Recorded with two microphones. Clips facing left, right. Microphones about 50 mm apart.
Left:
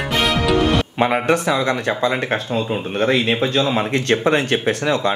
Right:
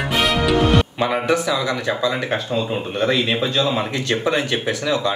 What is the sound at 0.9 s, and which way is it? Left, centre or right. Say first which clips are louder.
Speech: left 2 dB; left.